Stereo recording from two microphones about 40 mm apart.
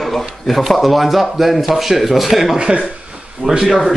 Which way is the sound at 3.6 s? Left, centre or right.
Centre.